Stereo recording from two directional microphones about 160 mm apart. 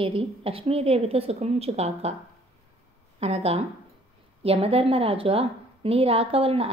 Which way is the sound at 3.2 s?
40° right (ahead or behind).